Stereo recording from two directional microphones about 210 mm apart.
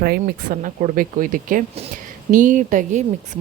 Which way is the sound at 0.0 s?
45° right (ahead or behind).